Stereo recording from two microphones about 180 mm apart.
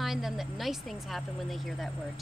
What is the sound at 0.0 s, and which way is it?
Speech, centre (ahead or behind).